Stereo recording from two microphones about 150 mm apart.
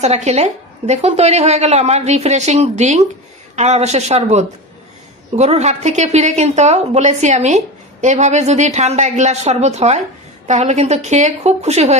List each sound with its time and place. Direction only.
0.0 s a woman's voice: 45° right (ahead or behind)